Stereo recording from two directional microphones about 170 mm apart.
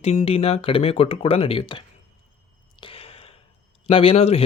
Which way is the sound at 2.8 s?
35° left (ahead or behind).